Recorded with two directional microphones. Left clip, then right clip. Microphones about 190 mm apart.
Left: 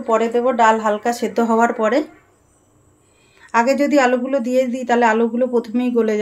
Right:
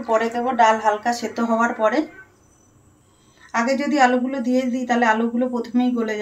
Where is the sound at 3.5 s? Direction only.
50° left (ahead or behind).